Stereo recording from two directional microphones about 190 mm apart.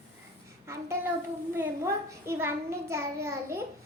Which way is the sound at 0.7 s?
15° right (ahead or behind).